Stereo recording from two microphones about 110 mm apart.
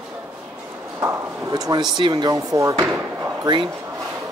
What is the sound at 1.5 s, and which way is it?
Speech, 35° right (ahead or behind).